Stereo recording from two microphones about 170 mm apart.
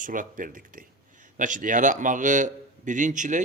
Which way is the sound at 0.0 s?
50° right (ahead or behind).